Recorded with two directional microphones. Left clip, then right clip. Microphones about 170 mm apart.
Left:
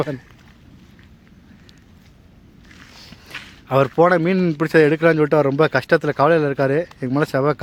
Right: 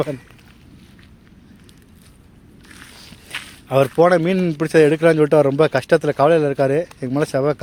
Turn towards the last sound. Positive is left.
turn(degrees=15)  # may be behind; listen again after turning